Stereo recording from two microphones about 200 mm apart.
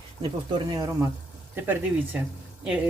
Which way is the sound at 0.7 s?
20° right (ahead or behind).